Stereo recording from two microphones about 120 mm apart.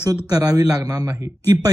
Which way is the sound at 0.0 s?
30° right (ahead or behind).